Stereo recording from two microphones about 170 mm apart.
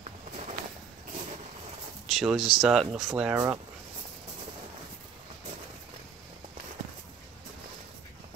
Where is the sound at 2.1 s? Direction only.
Centre (ahead or behind).